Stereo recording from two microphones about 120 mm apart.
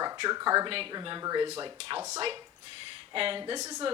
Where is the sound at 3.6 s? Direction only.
30° right (ahead or behind).